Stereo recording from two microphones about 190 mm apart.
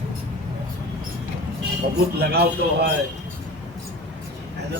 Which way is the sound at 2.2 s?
55° right (ahead or behind).